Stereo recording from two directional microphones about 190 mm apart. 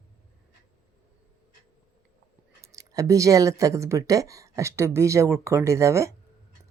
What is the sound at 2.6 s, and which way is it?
Speech, 15° right (ahead or behind).